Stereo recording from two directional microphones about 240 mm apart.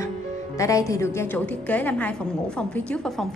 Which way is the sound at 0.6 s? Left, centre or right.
Centre.